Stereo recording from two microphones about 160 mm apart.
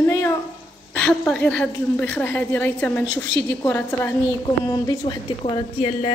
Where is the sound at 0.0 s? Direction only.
15° left (ahead or behind).